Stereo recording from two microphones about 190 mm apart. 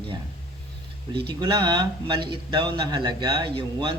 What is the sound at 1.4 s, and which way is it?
Speech, 20° right (ahead or behind).